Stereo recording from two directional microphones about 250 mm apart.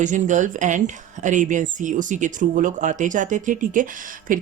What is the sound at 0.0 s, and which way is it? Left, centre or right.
Speech, right.